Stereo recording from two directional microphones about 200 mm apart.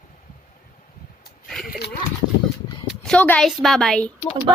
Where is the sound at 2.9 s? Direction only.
5° left (ahead or behind).